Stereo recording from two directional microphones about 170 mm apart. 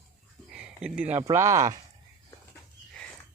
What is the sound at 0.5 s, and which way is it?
Speech, 5° right (ahead or behind).